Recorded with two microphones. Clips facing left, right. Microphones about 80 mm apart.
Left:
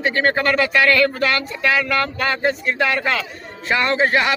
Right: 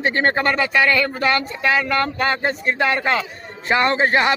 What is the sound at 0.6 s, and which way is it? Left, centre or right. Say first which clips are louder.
Speech: left 2 dB; centre.